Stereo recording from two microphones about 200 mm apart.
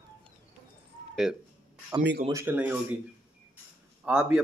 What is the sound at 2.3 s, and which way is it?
Speech, 15° right (ahead or behind).